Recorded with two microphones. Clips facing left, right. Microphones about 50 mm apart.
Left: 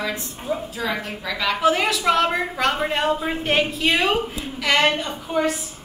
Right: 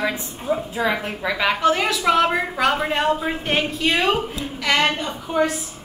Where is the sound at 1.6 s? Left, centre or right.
Centre.